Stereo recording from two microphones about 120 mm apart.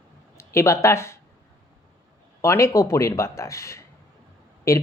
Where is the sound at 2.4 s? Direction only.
25° left (ahead or behind).